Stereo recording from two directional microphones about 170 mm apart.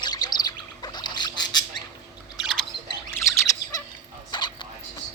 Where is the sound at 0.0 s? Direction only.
25° left (ahead or behind).